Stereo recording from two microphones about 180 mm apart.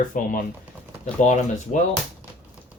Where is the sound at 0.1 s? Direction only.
50° left (ahead or behind).